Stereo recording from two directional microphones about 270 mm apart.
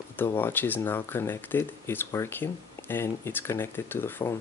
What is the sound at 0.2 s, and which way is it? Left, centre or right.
Speech, centre.